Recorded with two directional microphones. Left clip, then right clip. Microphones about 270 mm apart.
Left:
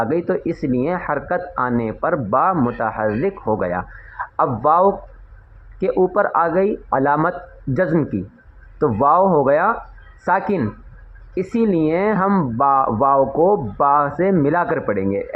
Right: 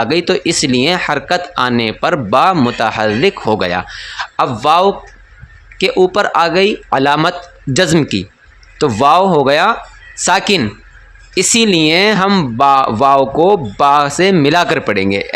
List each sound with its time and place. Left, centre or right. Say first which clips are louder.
0.0 s speech: right 6 dB; right